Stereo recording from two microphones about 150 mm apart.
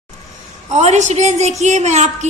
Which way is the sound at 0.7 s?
50° right (ahead or behind).